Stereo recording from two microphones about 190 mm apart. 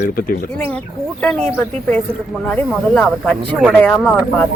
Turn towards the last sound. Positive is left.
turn(degrees=10)  # may be behind; listen again after turning